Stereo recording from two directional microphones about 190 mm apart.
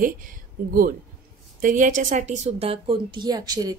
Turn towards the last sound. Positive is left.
turn(degrees=-20)  # may be behind; listen again after turning